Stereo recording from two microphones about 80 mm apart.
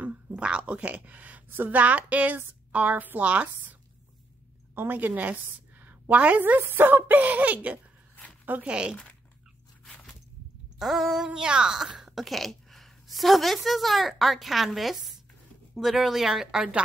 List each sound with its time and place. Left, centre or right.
0.0 s a woman's voice: centre
4.7 s a woman's voice: right
10.8 s speech: centre